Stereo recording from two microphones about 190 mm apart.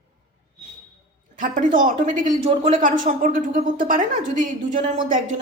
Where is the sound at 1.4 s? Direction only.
45° right (ahead or behind).